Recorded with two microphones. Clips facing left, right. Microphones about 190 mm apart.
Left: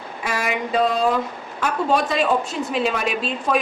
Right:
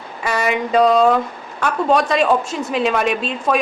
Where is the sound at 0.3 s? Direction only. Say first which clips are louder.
Right 5 dB; 70° right (ahead or behind).